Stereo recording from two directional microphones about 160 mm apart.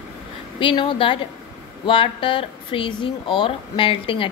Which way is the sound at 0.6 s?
30° left (ahead or behind).